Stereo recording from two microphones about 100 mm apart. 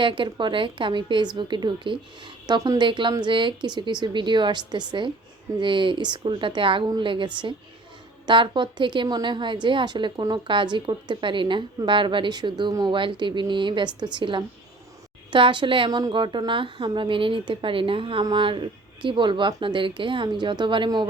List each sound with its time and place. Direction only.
0.0 s a woman's voice: 55° right (ahead or behind)
8.3 s a woman's voice: 50° right (ahead or behind)